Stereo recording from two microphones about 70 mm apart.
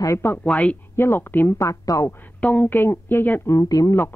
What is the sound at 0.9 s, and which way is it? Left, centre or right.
Speech, left.